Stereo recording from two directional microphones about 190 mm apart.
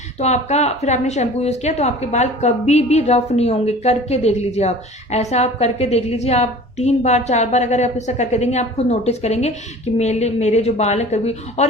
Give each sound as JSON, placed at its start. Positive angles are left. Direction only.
{"t": 0.2, "sound": "a woman's voice", "side_deg": 35}